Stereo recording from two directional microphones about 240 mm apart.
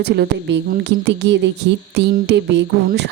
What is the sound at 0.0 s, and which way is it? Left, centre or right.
A woman's voice, right.